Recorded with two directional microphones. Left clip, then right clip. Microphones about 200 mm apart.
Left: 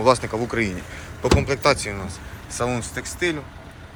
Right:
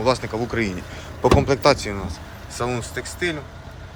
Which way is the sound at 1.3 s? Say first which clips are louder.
Right 1 dB; 20° right (ahead or behind).